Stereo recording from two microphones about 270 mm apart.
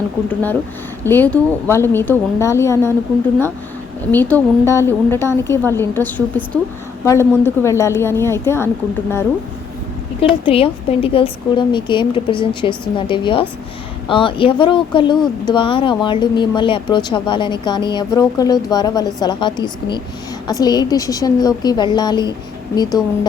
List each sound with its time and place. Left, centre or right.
1.0 s speech: centre
4.1 s speech: centre
10.2 s speech: centre